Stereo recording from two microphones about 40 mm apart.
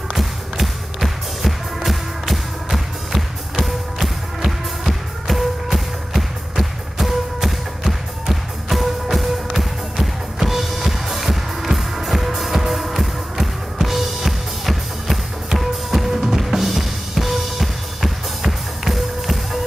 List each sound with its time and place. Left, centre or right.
0.2 s music: centre